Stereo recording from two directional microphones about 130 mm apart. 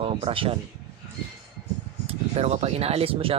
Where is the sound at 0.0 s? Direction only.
45° right (ahead or behind).